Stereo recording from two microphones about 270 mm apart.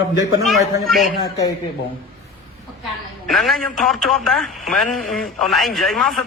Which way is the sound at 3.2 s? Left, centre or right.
Centre.